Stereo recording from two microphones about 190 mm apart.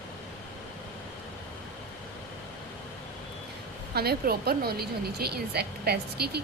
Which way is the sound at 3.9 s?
55° right (ahead or behind).